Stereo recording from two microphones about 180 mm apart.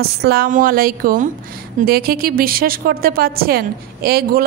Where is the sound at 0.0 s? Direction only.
60° right (ahead or behind).